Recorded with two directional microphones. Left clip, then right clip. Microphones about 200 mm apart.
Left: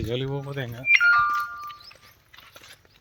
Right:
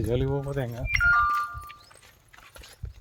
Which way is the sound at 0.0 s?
35° right (ahead or behind).